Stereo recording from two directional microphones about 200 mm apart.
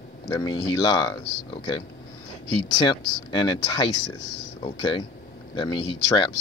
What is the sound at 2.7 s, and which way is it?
Speech, 20° left (ahead or behind).